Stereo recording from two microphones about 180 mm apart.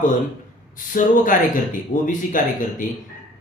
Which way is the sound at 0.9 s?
45° left (ahead or behind).